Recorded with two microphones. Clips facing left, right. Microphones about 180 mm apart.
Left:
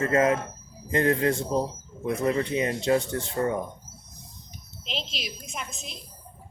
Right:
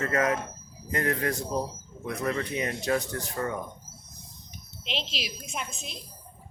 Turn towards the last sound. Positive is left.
turn(degrees=0)  # may be behind; listen again after turning